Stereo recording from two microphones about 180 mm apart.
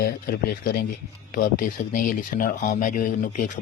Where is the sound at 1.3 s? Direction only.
50° left (ahead or behind).